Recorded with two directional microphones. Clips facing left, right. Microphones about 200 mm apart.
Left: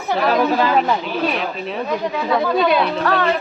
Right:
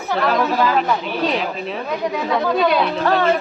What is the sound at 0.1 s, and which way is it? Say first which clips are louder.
Speech: left 1 dB; 5° left (ahead or behind).